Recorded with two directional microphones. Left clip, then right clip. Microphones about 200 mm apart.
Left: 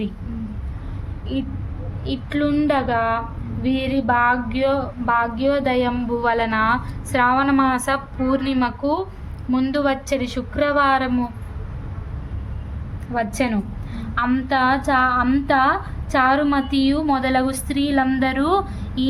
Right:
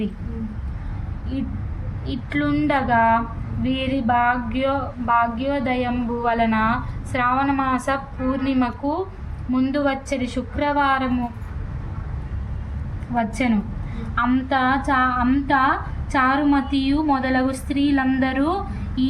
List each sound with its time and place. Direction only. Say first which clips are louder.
2.3 s a woman's voice: left 1 dB; 40° left (ahead or behind)
13.1 s speech: even; 45° left (ahead or behind)